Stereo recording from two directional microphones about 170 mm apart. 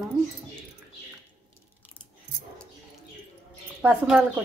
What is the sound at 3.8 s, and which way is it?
Speech, 5° right (ahead or behind).